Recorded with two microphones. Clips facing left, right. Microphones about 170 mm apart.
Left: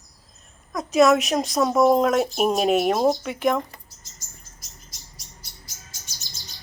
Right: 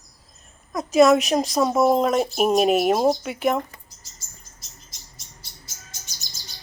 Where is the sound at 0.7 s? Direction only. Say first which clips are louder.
Right 2 dB; centre (ahead or behind).